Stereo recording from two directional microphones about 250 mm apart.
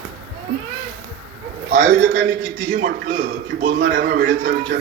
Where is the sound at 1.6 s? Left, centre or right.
Right.